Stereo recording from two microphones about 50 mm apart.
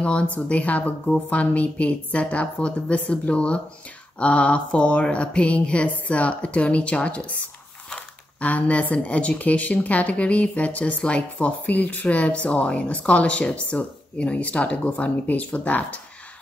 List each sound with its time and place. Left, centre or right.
0.0 s speech: left
11.3 s speech: left